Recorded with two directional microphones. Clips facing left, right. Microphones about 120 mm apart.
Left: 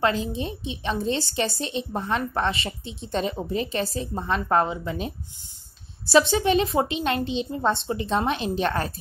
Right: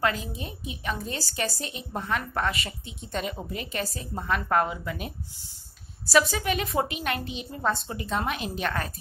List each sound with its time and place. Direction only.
0.0 s a woman's voice: 30° left (ahead or behind)